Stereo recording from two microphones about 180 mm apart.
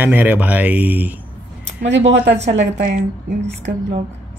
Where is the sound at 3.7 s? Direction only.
80° right.